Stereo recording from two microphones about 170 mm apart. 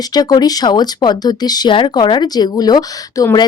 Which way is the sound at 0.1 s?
25° left (ahead or behind).